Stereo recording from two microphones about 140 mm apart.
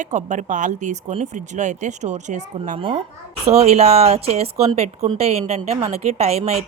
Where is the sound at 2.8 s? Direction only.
40° right (ahead or behind).